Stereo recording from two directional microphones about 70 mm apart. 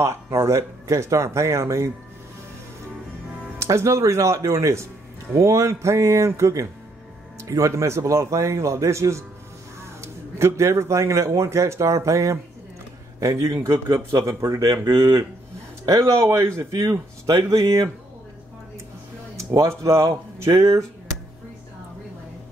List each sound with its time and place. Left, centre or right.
0.0 s speech: right
3.5 s speech: right
14.9 s speech: right
16.1 s speech: right
17.4 s speech: right
19.3 s speech: right